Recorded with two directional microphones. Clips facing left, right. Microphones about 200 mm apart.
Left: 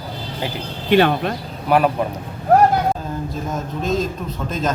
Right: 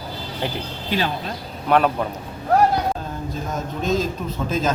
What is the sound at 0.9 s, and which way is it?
Speech, 65° left (ahead or behind).